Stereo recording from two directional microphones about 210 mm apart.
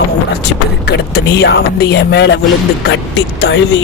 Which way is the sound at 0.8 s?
50° left (ahead or behind).